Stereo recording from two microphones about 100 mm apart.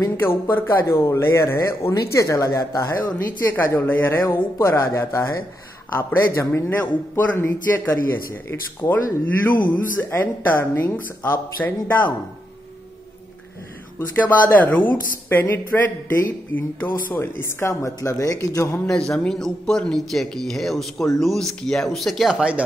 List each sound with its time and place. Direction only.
0.0 s speech: 25° left (ahead or behind)
4.6 s speech: 30° left (ahead or behind)
13.9 s speech: 20° left (ahead or behind)
18.9 s speech: 5° left (ahead or behind); by 22.6 s 10° right (ahead or behind)